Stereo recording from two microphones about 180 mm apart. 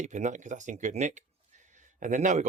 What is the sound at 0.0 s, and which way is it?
Speech, 40° right (ahead or behind).